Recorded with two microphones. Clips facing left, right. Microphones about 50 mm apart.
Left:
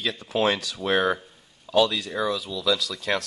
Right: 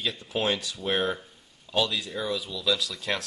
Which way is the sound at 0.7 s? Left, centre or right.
Left.